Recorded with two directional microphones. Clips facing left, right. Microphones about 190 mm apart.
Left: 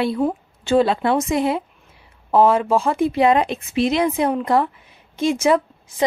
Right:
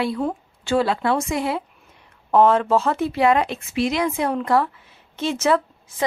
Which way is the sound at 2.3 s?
10° left (ahead or behind).